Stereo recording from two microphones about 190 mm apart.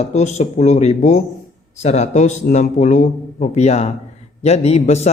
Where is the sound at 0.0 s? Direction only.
35° left (ahead or behind).